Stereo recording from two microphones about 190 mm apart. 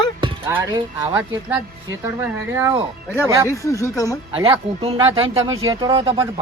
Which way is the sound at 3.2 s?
15° right (ahead or behind).